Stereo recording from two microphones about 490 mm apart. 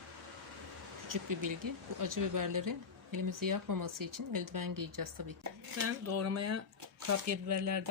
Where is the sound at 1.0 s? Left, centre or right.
Right.